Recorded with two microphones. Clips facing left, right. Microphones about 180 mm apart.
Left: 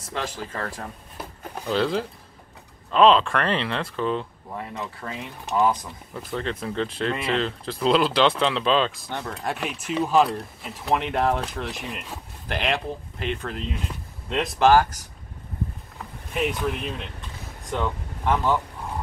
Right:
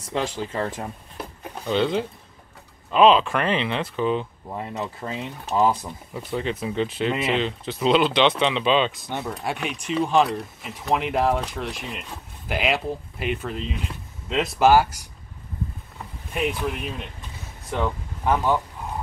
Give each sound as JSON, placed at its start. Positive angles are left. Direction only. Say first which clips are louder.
{"t": 0.0, "sound": "speech", "louder": "right 4 dB", "side_deg": -25}
{"t": 1.7, "sound": "speech", "louder": "right 1 dB", "side_deg": 0}
{"t": 4.5, "sound": "speech", "louder": "right 3 dB", "side_deg": -20}
{"t": 6.1, "sound": "speech", "louder": "right 2 dB", "side_deg": -5}
{"t": 16.3, "sound": "speech", "louder": "even", "side_deg": 0}